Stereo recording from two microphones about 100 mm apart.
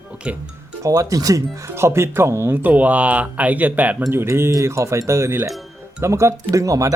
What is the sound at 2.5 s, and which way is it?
Speech, 15° right (ahead or behind).